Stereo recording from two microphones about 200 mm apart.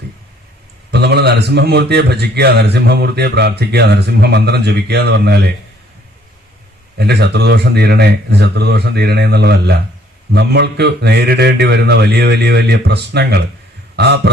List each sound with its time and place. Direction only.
0.9 s a man's voice: 55° right (ahead or behind)
7.0 s a man's voice: 55° right (ahead or behind)
13.9 s heart sounds: 55° right (ahead or behind)